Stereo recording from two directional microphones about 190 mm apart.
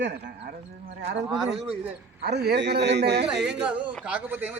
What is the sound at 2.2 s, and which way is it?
Speech, 60° right (ahead or behind).